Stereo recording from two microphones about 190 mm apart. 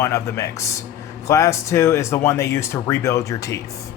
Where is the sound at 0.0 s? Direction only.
15° left (ahead or behind).